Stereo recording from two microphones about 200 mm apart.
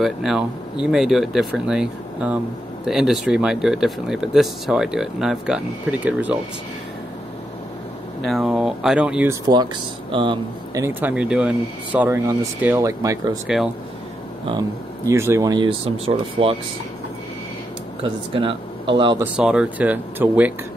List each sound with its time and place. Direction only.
0.0 s speech: centre (ahead or behind)
8.3 s speech: centre (ahead or behind)
10.1 s speech: 25° right (ahead or behind)
15.0 s speech: 15° right (ahead or behind)
18.0 s speech: 25° right (ahead or behind)
19.3 s speech: 5° right (ahead or behind)